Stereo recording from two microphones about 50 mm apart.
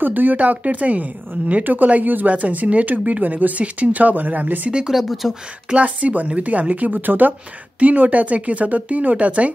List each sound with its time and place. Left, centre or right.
0.0 s speech: right
4.6 s speech: centre
4.9 s speech: centre
5.7 s speech: right